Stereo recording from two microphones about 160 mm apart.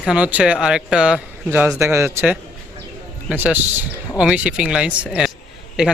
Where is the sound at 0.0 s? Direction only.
5° right (ahead or behind).